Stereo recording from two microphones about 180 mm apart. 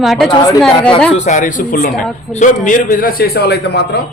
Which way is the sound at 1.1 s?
45° left (ahead or behind).